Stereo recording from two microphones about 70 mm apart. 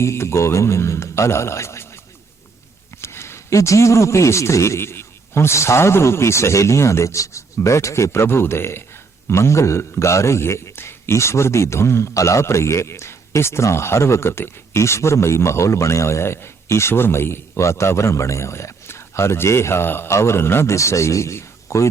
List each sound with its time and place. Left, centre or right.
0.0 s a man's voice: left
3.0 s a man's voice: left